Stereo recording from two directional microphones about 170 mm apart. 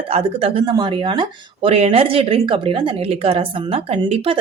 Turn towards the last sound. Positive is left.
turn(degrees=-35)  # may be behind; listen again after turning